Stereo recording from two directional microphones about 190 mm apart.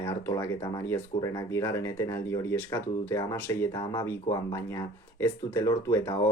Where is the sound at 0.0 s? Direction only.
15° left (ahead or behind).